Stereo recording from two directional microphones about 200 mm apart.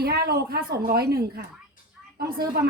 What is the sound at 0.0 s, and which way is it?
A woman's voice, 50° right (ahead or behind).